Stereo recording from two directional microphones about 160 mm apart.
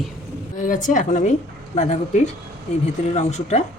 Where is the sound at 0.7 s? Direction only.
50° left (ahead or behind).